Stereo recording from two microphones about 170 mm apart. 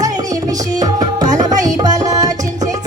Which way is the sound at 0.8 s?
20° right (ahead or behind).